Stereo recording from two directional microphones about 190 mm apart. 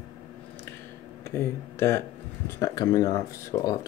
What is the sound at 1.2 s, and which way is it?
Speech, 15° left (ahead or behind).